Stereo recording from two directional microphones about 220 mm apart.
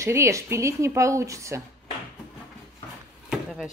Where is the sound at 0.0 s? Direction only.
15° right (ahead or behind).